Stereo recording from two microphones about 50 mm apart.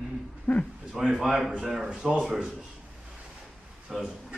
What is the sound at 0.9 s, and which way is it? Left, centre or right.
Speech, centre.